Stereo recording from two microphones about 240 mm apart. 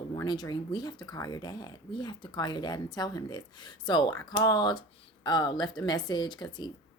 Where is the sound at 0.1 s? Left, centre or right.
Centre.